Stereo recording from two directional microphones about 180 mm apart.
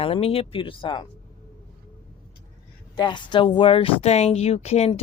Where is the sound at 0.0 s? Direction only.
35° left (ahead or behind).